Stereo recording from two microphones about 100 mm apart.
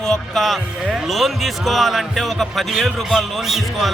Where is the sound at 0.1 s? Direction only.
Centre (ahead or behind).